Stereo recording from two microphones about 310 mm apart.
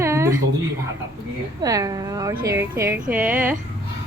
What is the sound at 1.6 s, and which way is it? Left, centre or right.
A woman's voice, centre.